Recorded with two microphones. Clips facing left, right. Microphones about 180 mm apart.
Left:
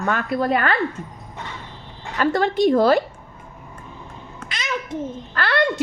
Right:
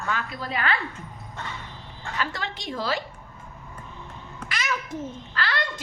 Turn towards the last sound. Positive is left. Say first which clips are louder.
# left 9 dB
turn(degrees=60)  # may be behind; listen again after turning